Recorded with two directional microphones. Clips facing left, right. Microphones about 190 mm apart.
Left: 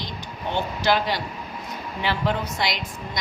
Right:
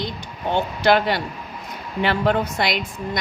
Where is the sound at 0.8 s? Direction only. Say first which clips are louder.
Right 5 dB; 55° right (ahead or behind).